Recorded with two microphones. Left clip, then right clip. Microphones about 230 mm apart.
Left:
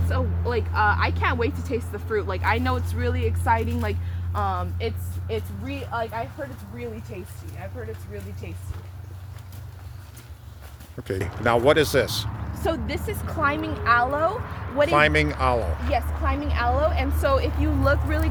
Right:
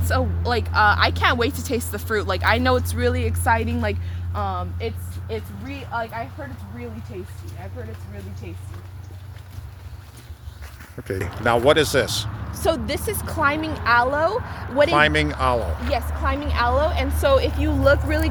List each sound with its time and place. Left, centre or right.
0.1 s speech: right
4.4 s speech: centre
5.9 s speech: left
11.1 s speech: centre
12.5 s a woman's voice: right
14.8 s speech: centre
15.9 s a woman's voice: right